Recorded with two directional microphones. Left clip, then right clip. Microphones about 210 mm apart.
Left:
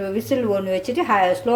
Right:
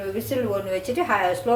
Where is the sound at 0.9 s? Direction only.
45° left (ahead or behind).